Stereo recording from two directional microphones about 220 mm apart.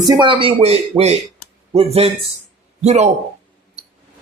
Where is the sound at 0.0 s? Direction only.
20° right (ahead or behind).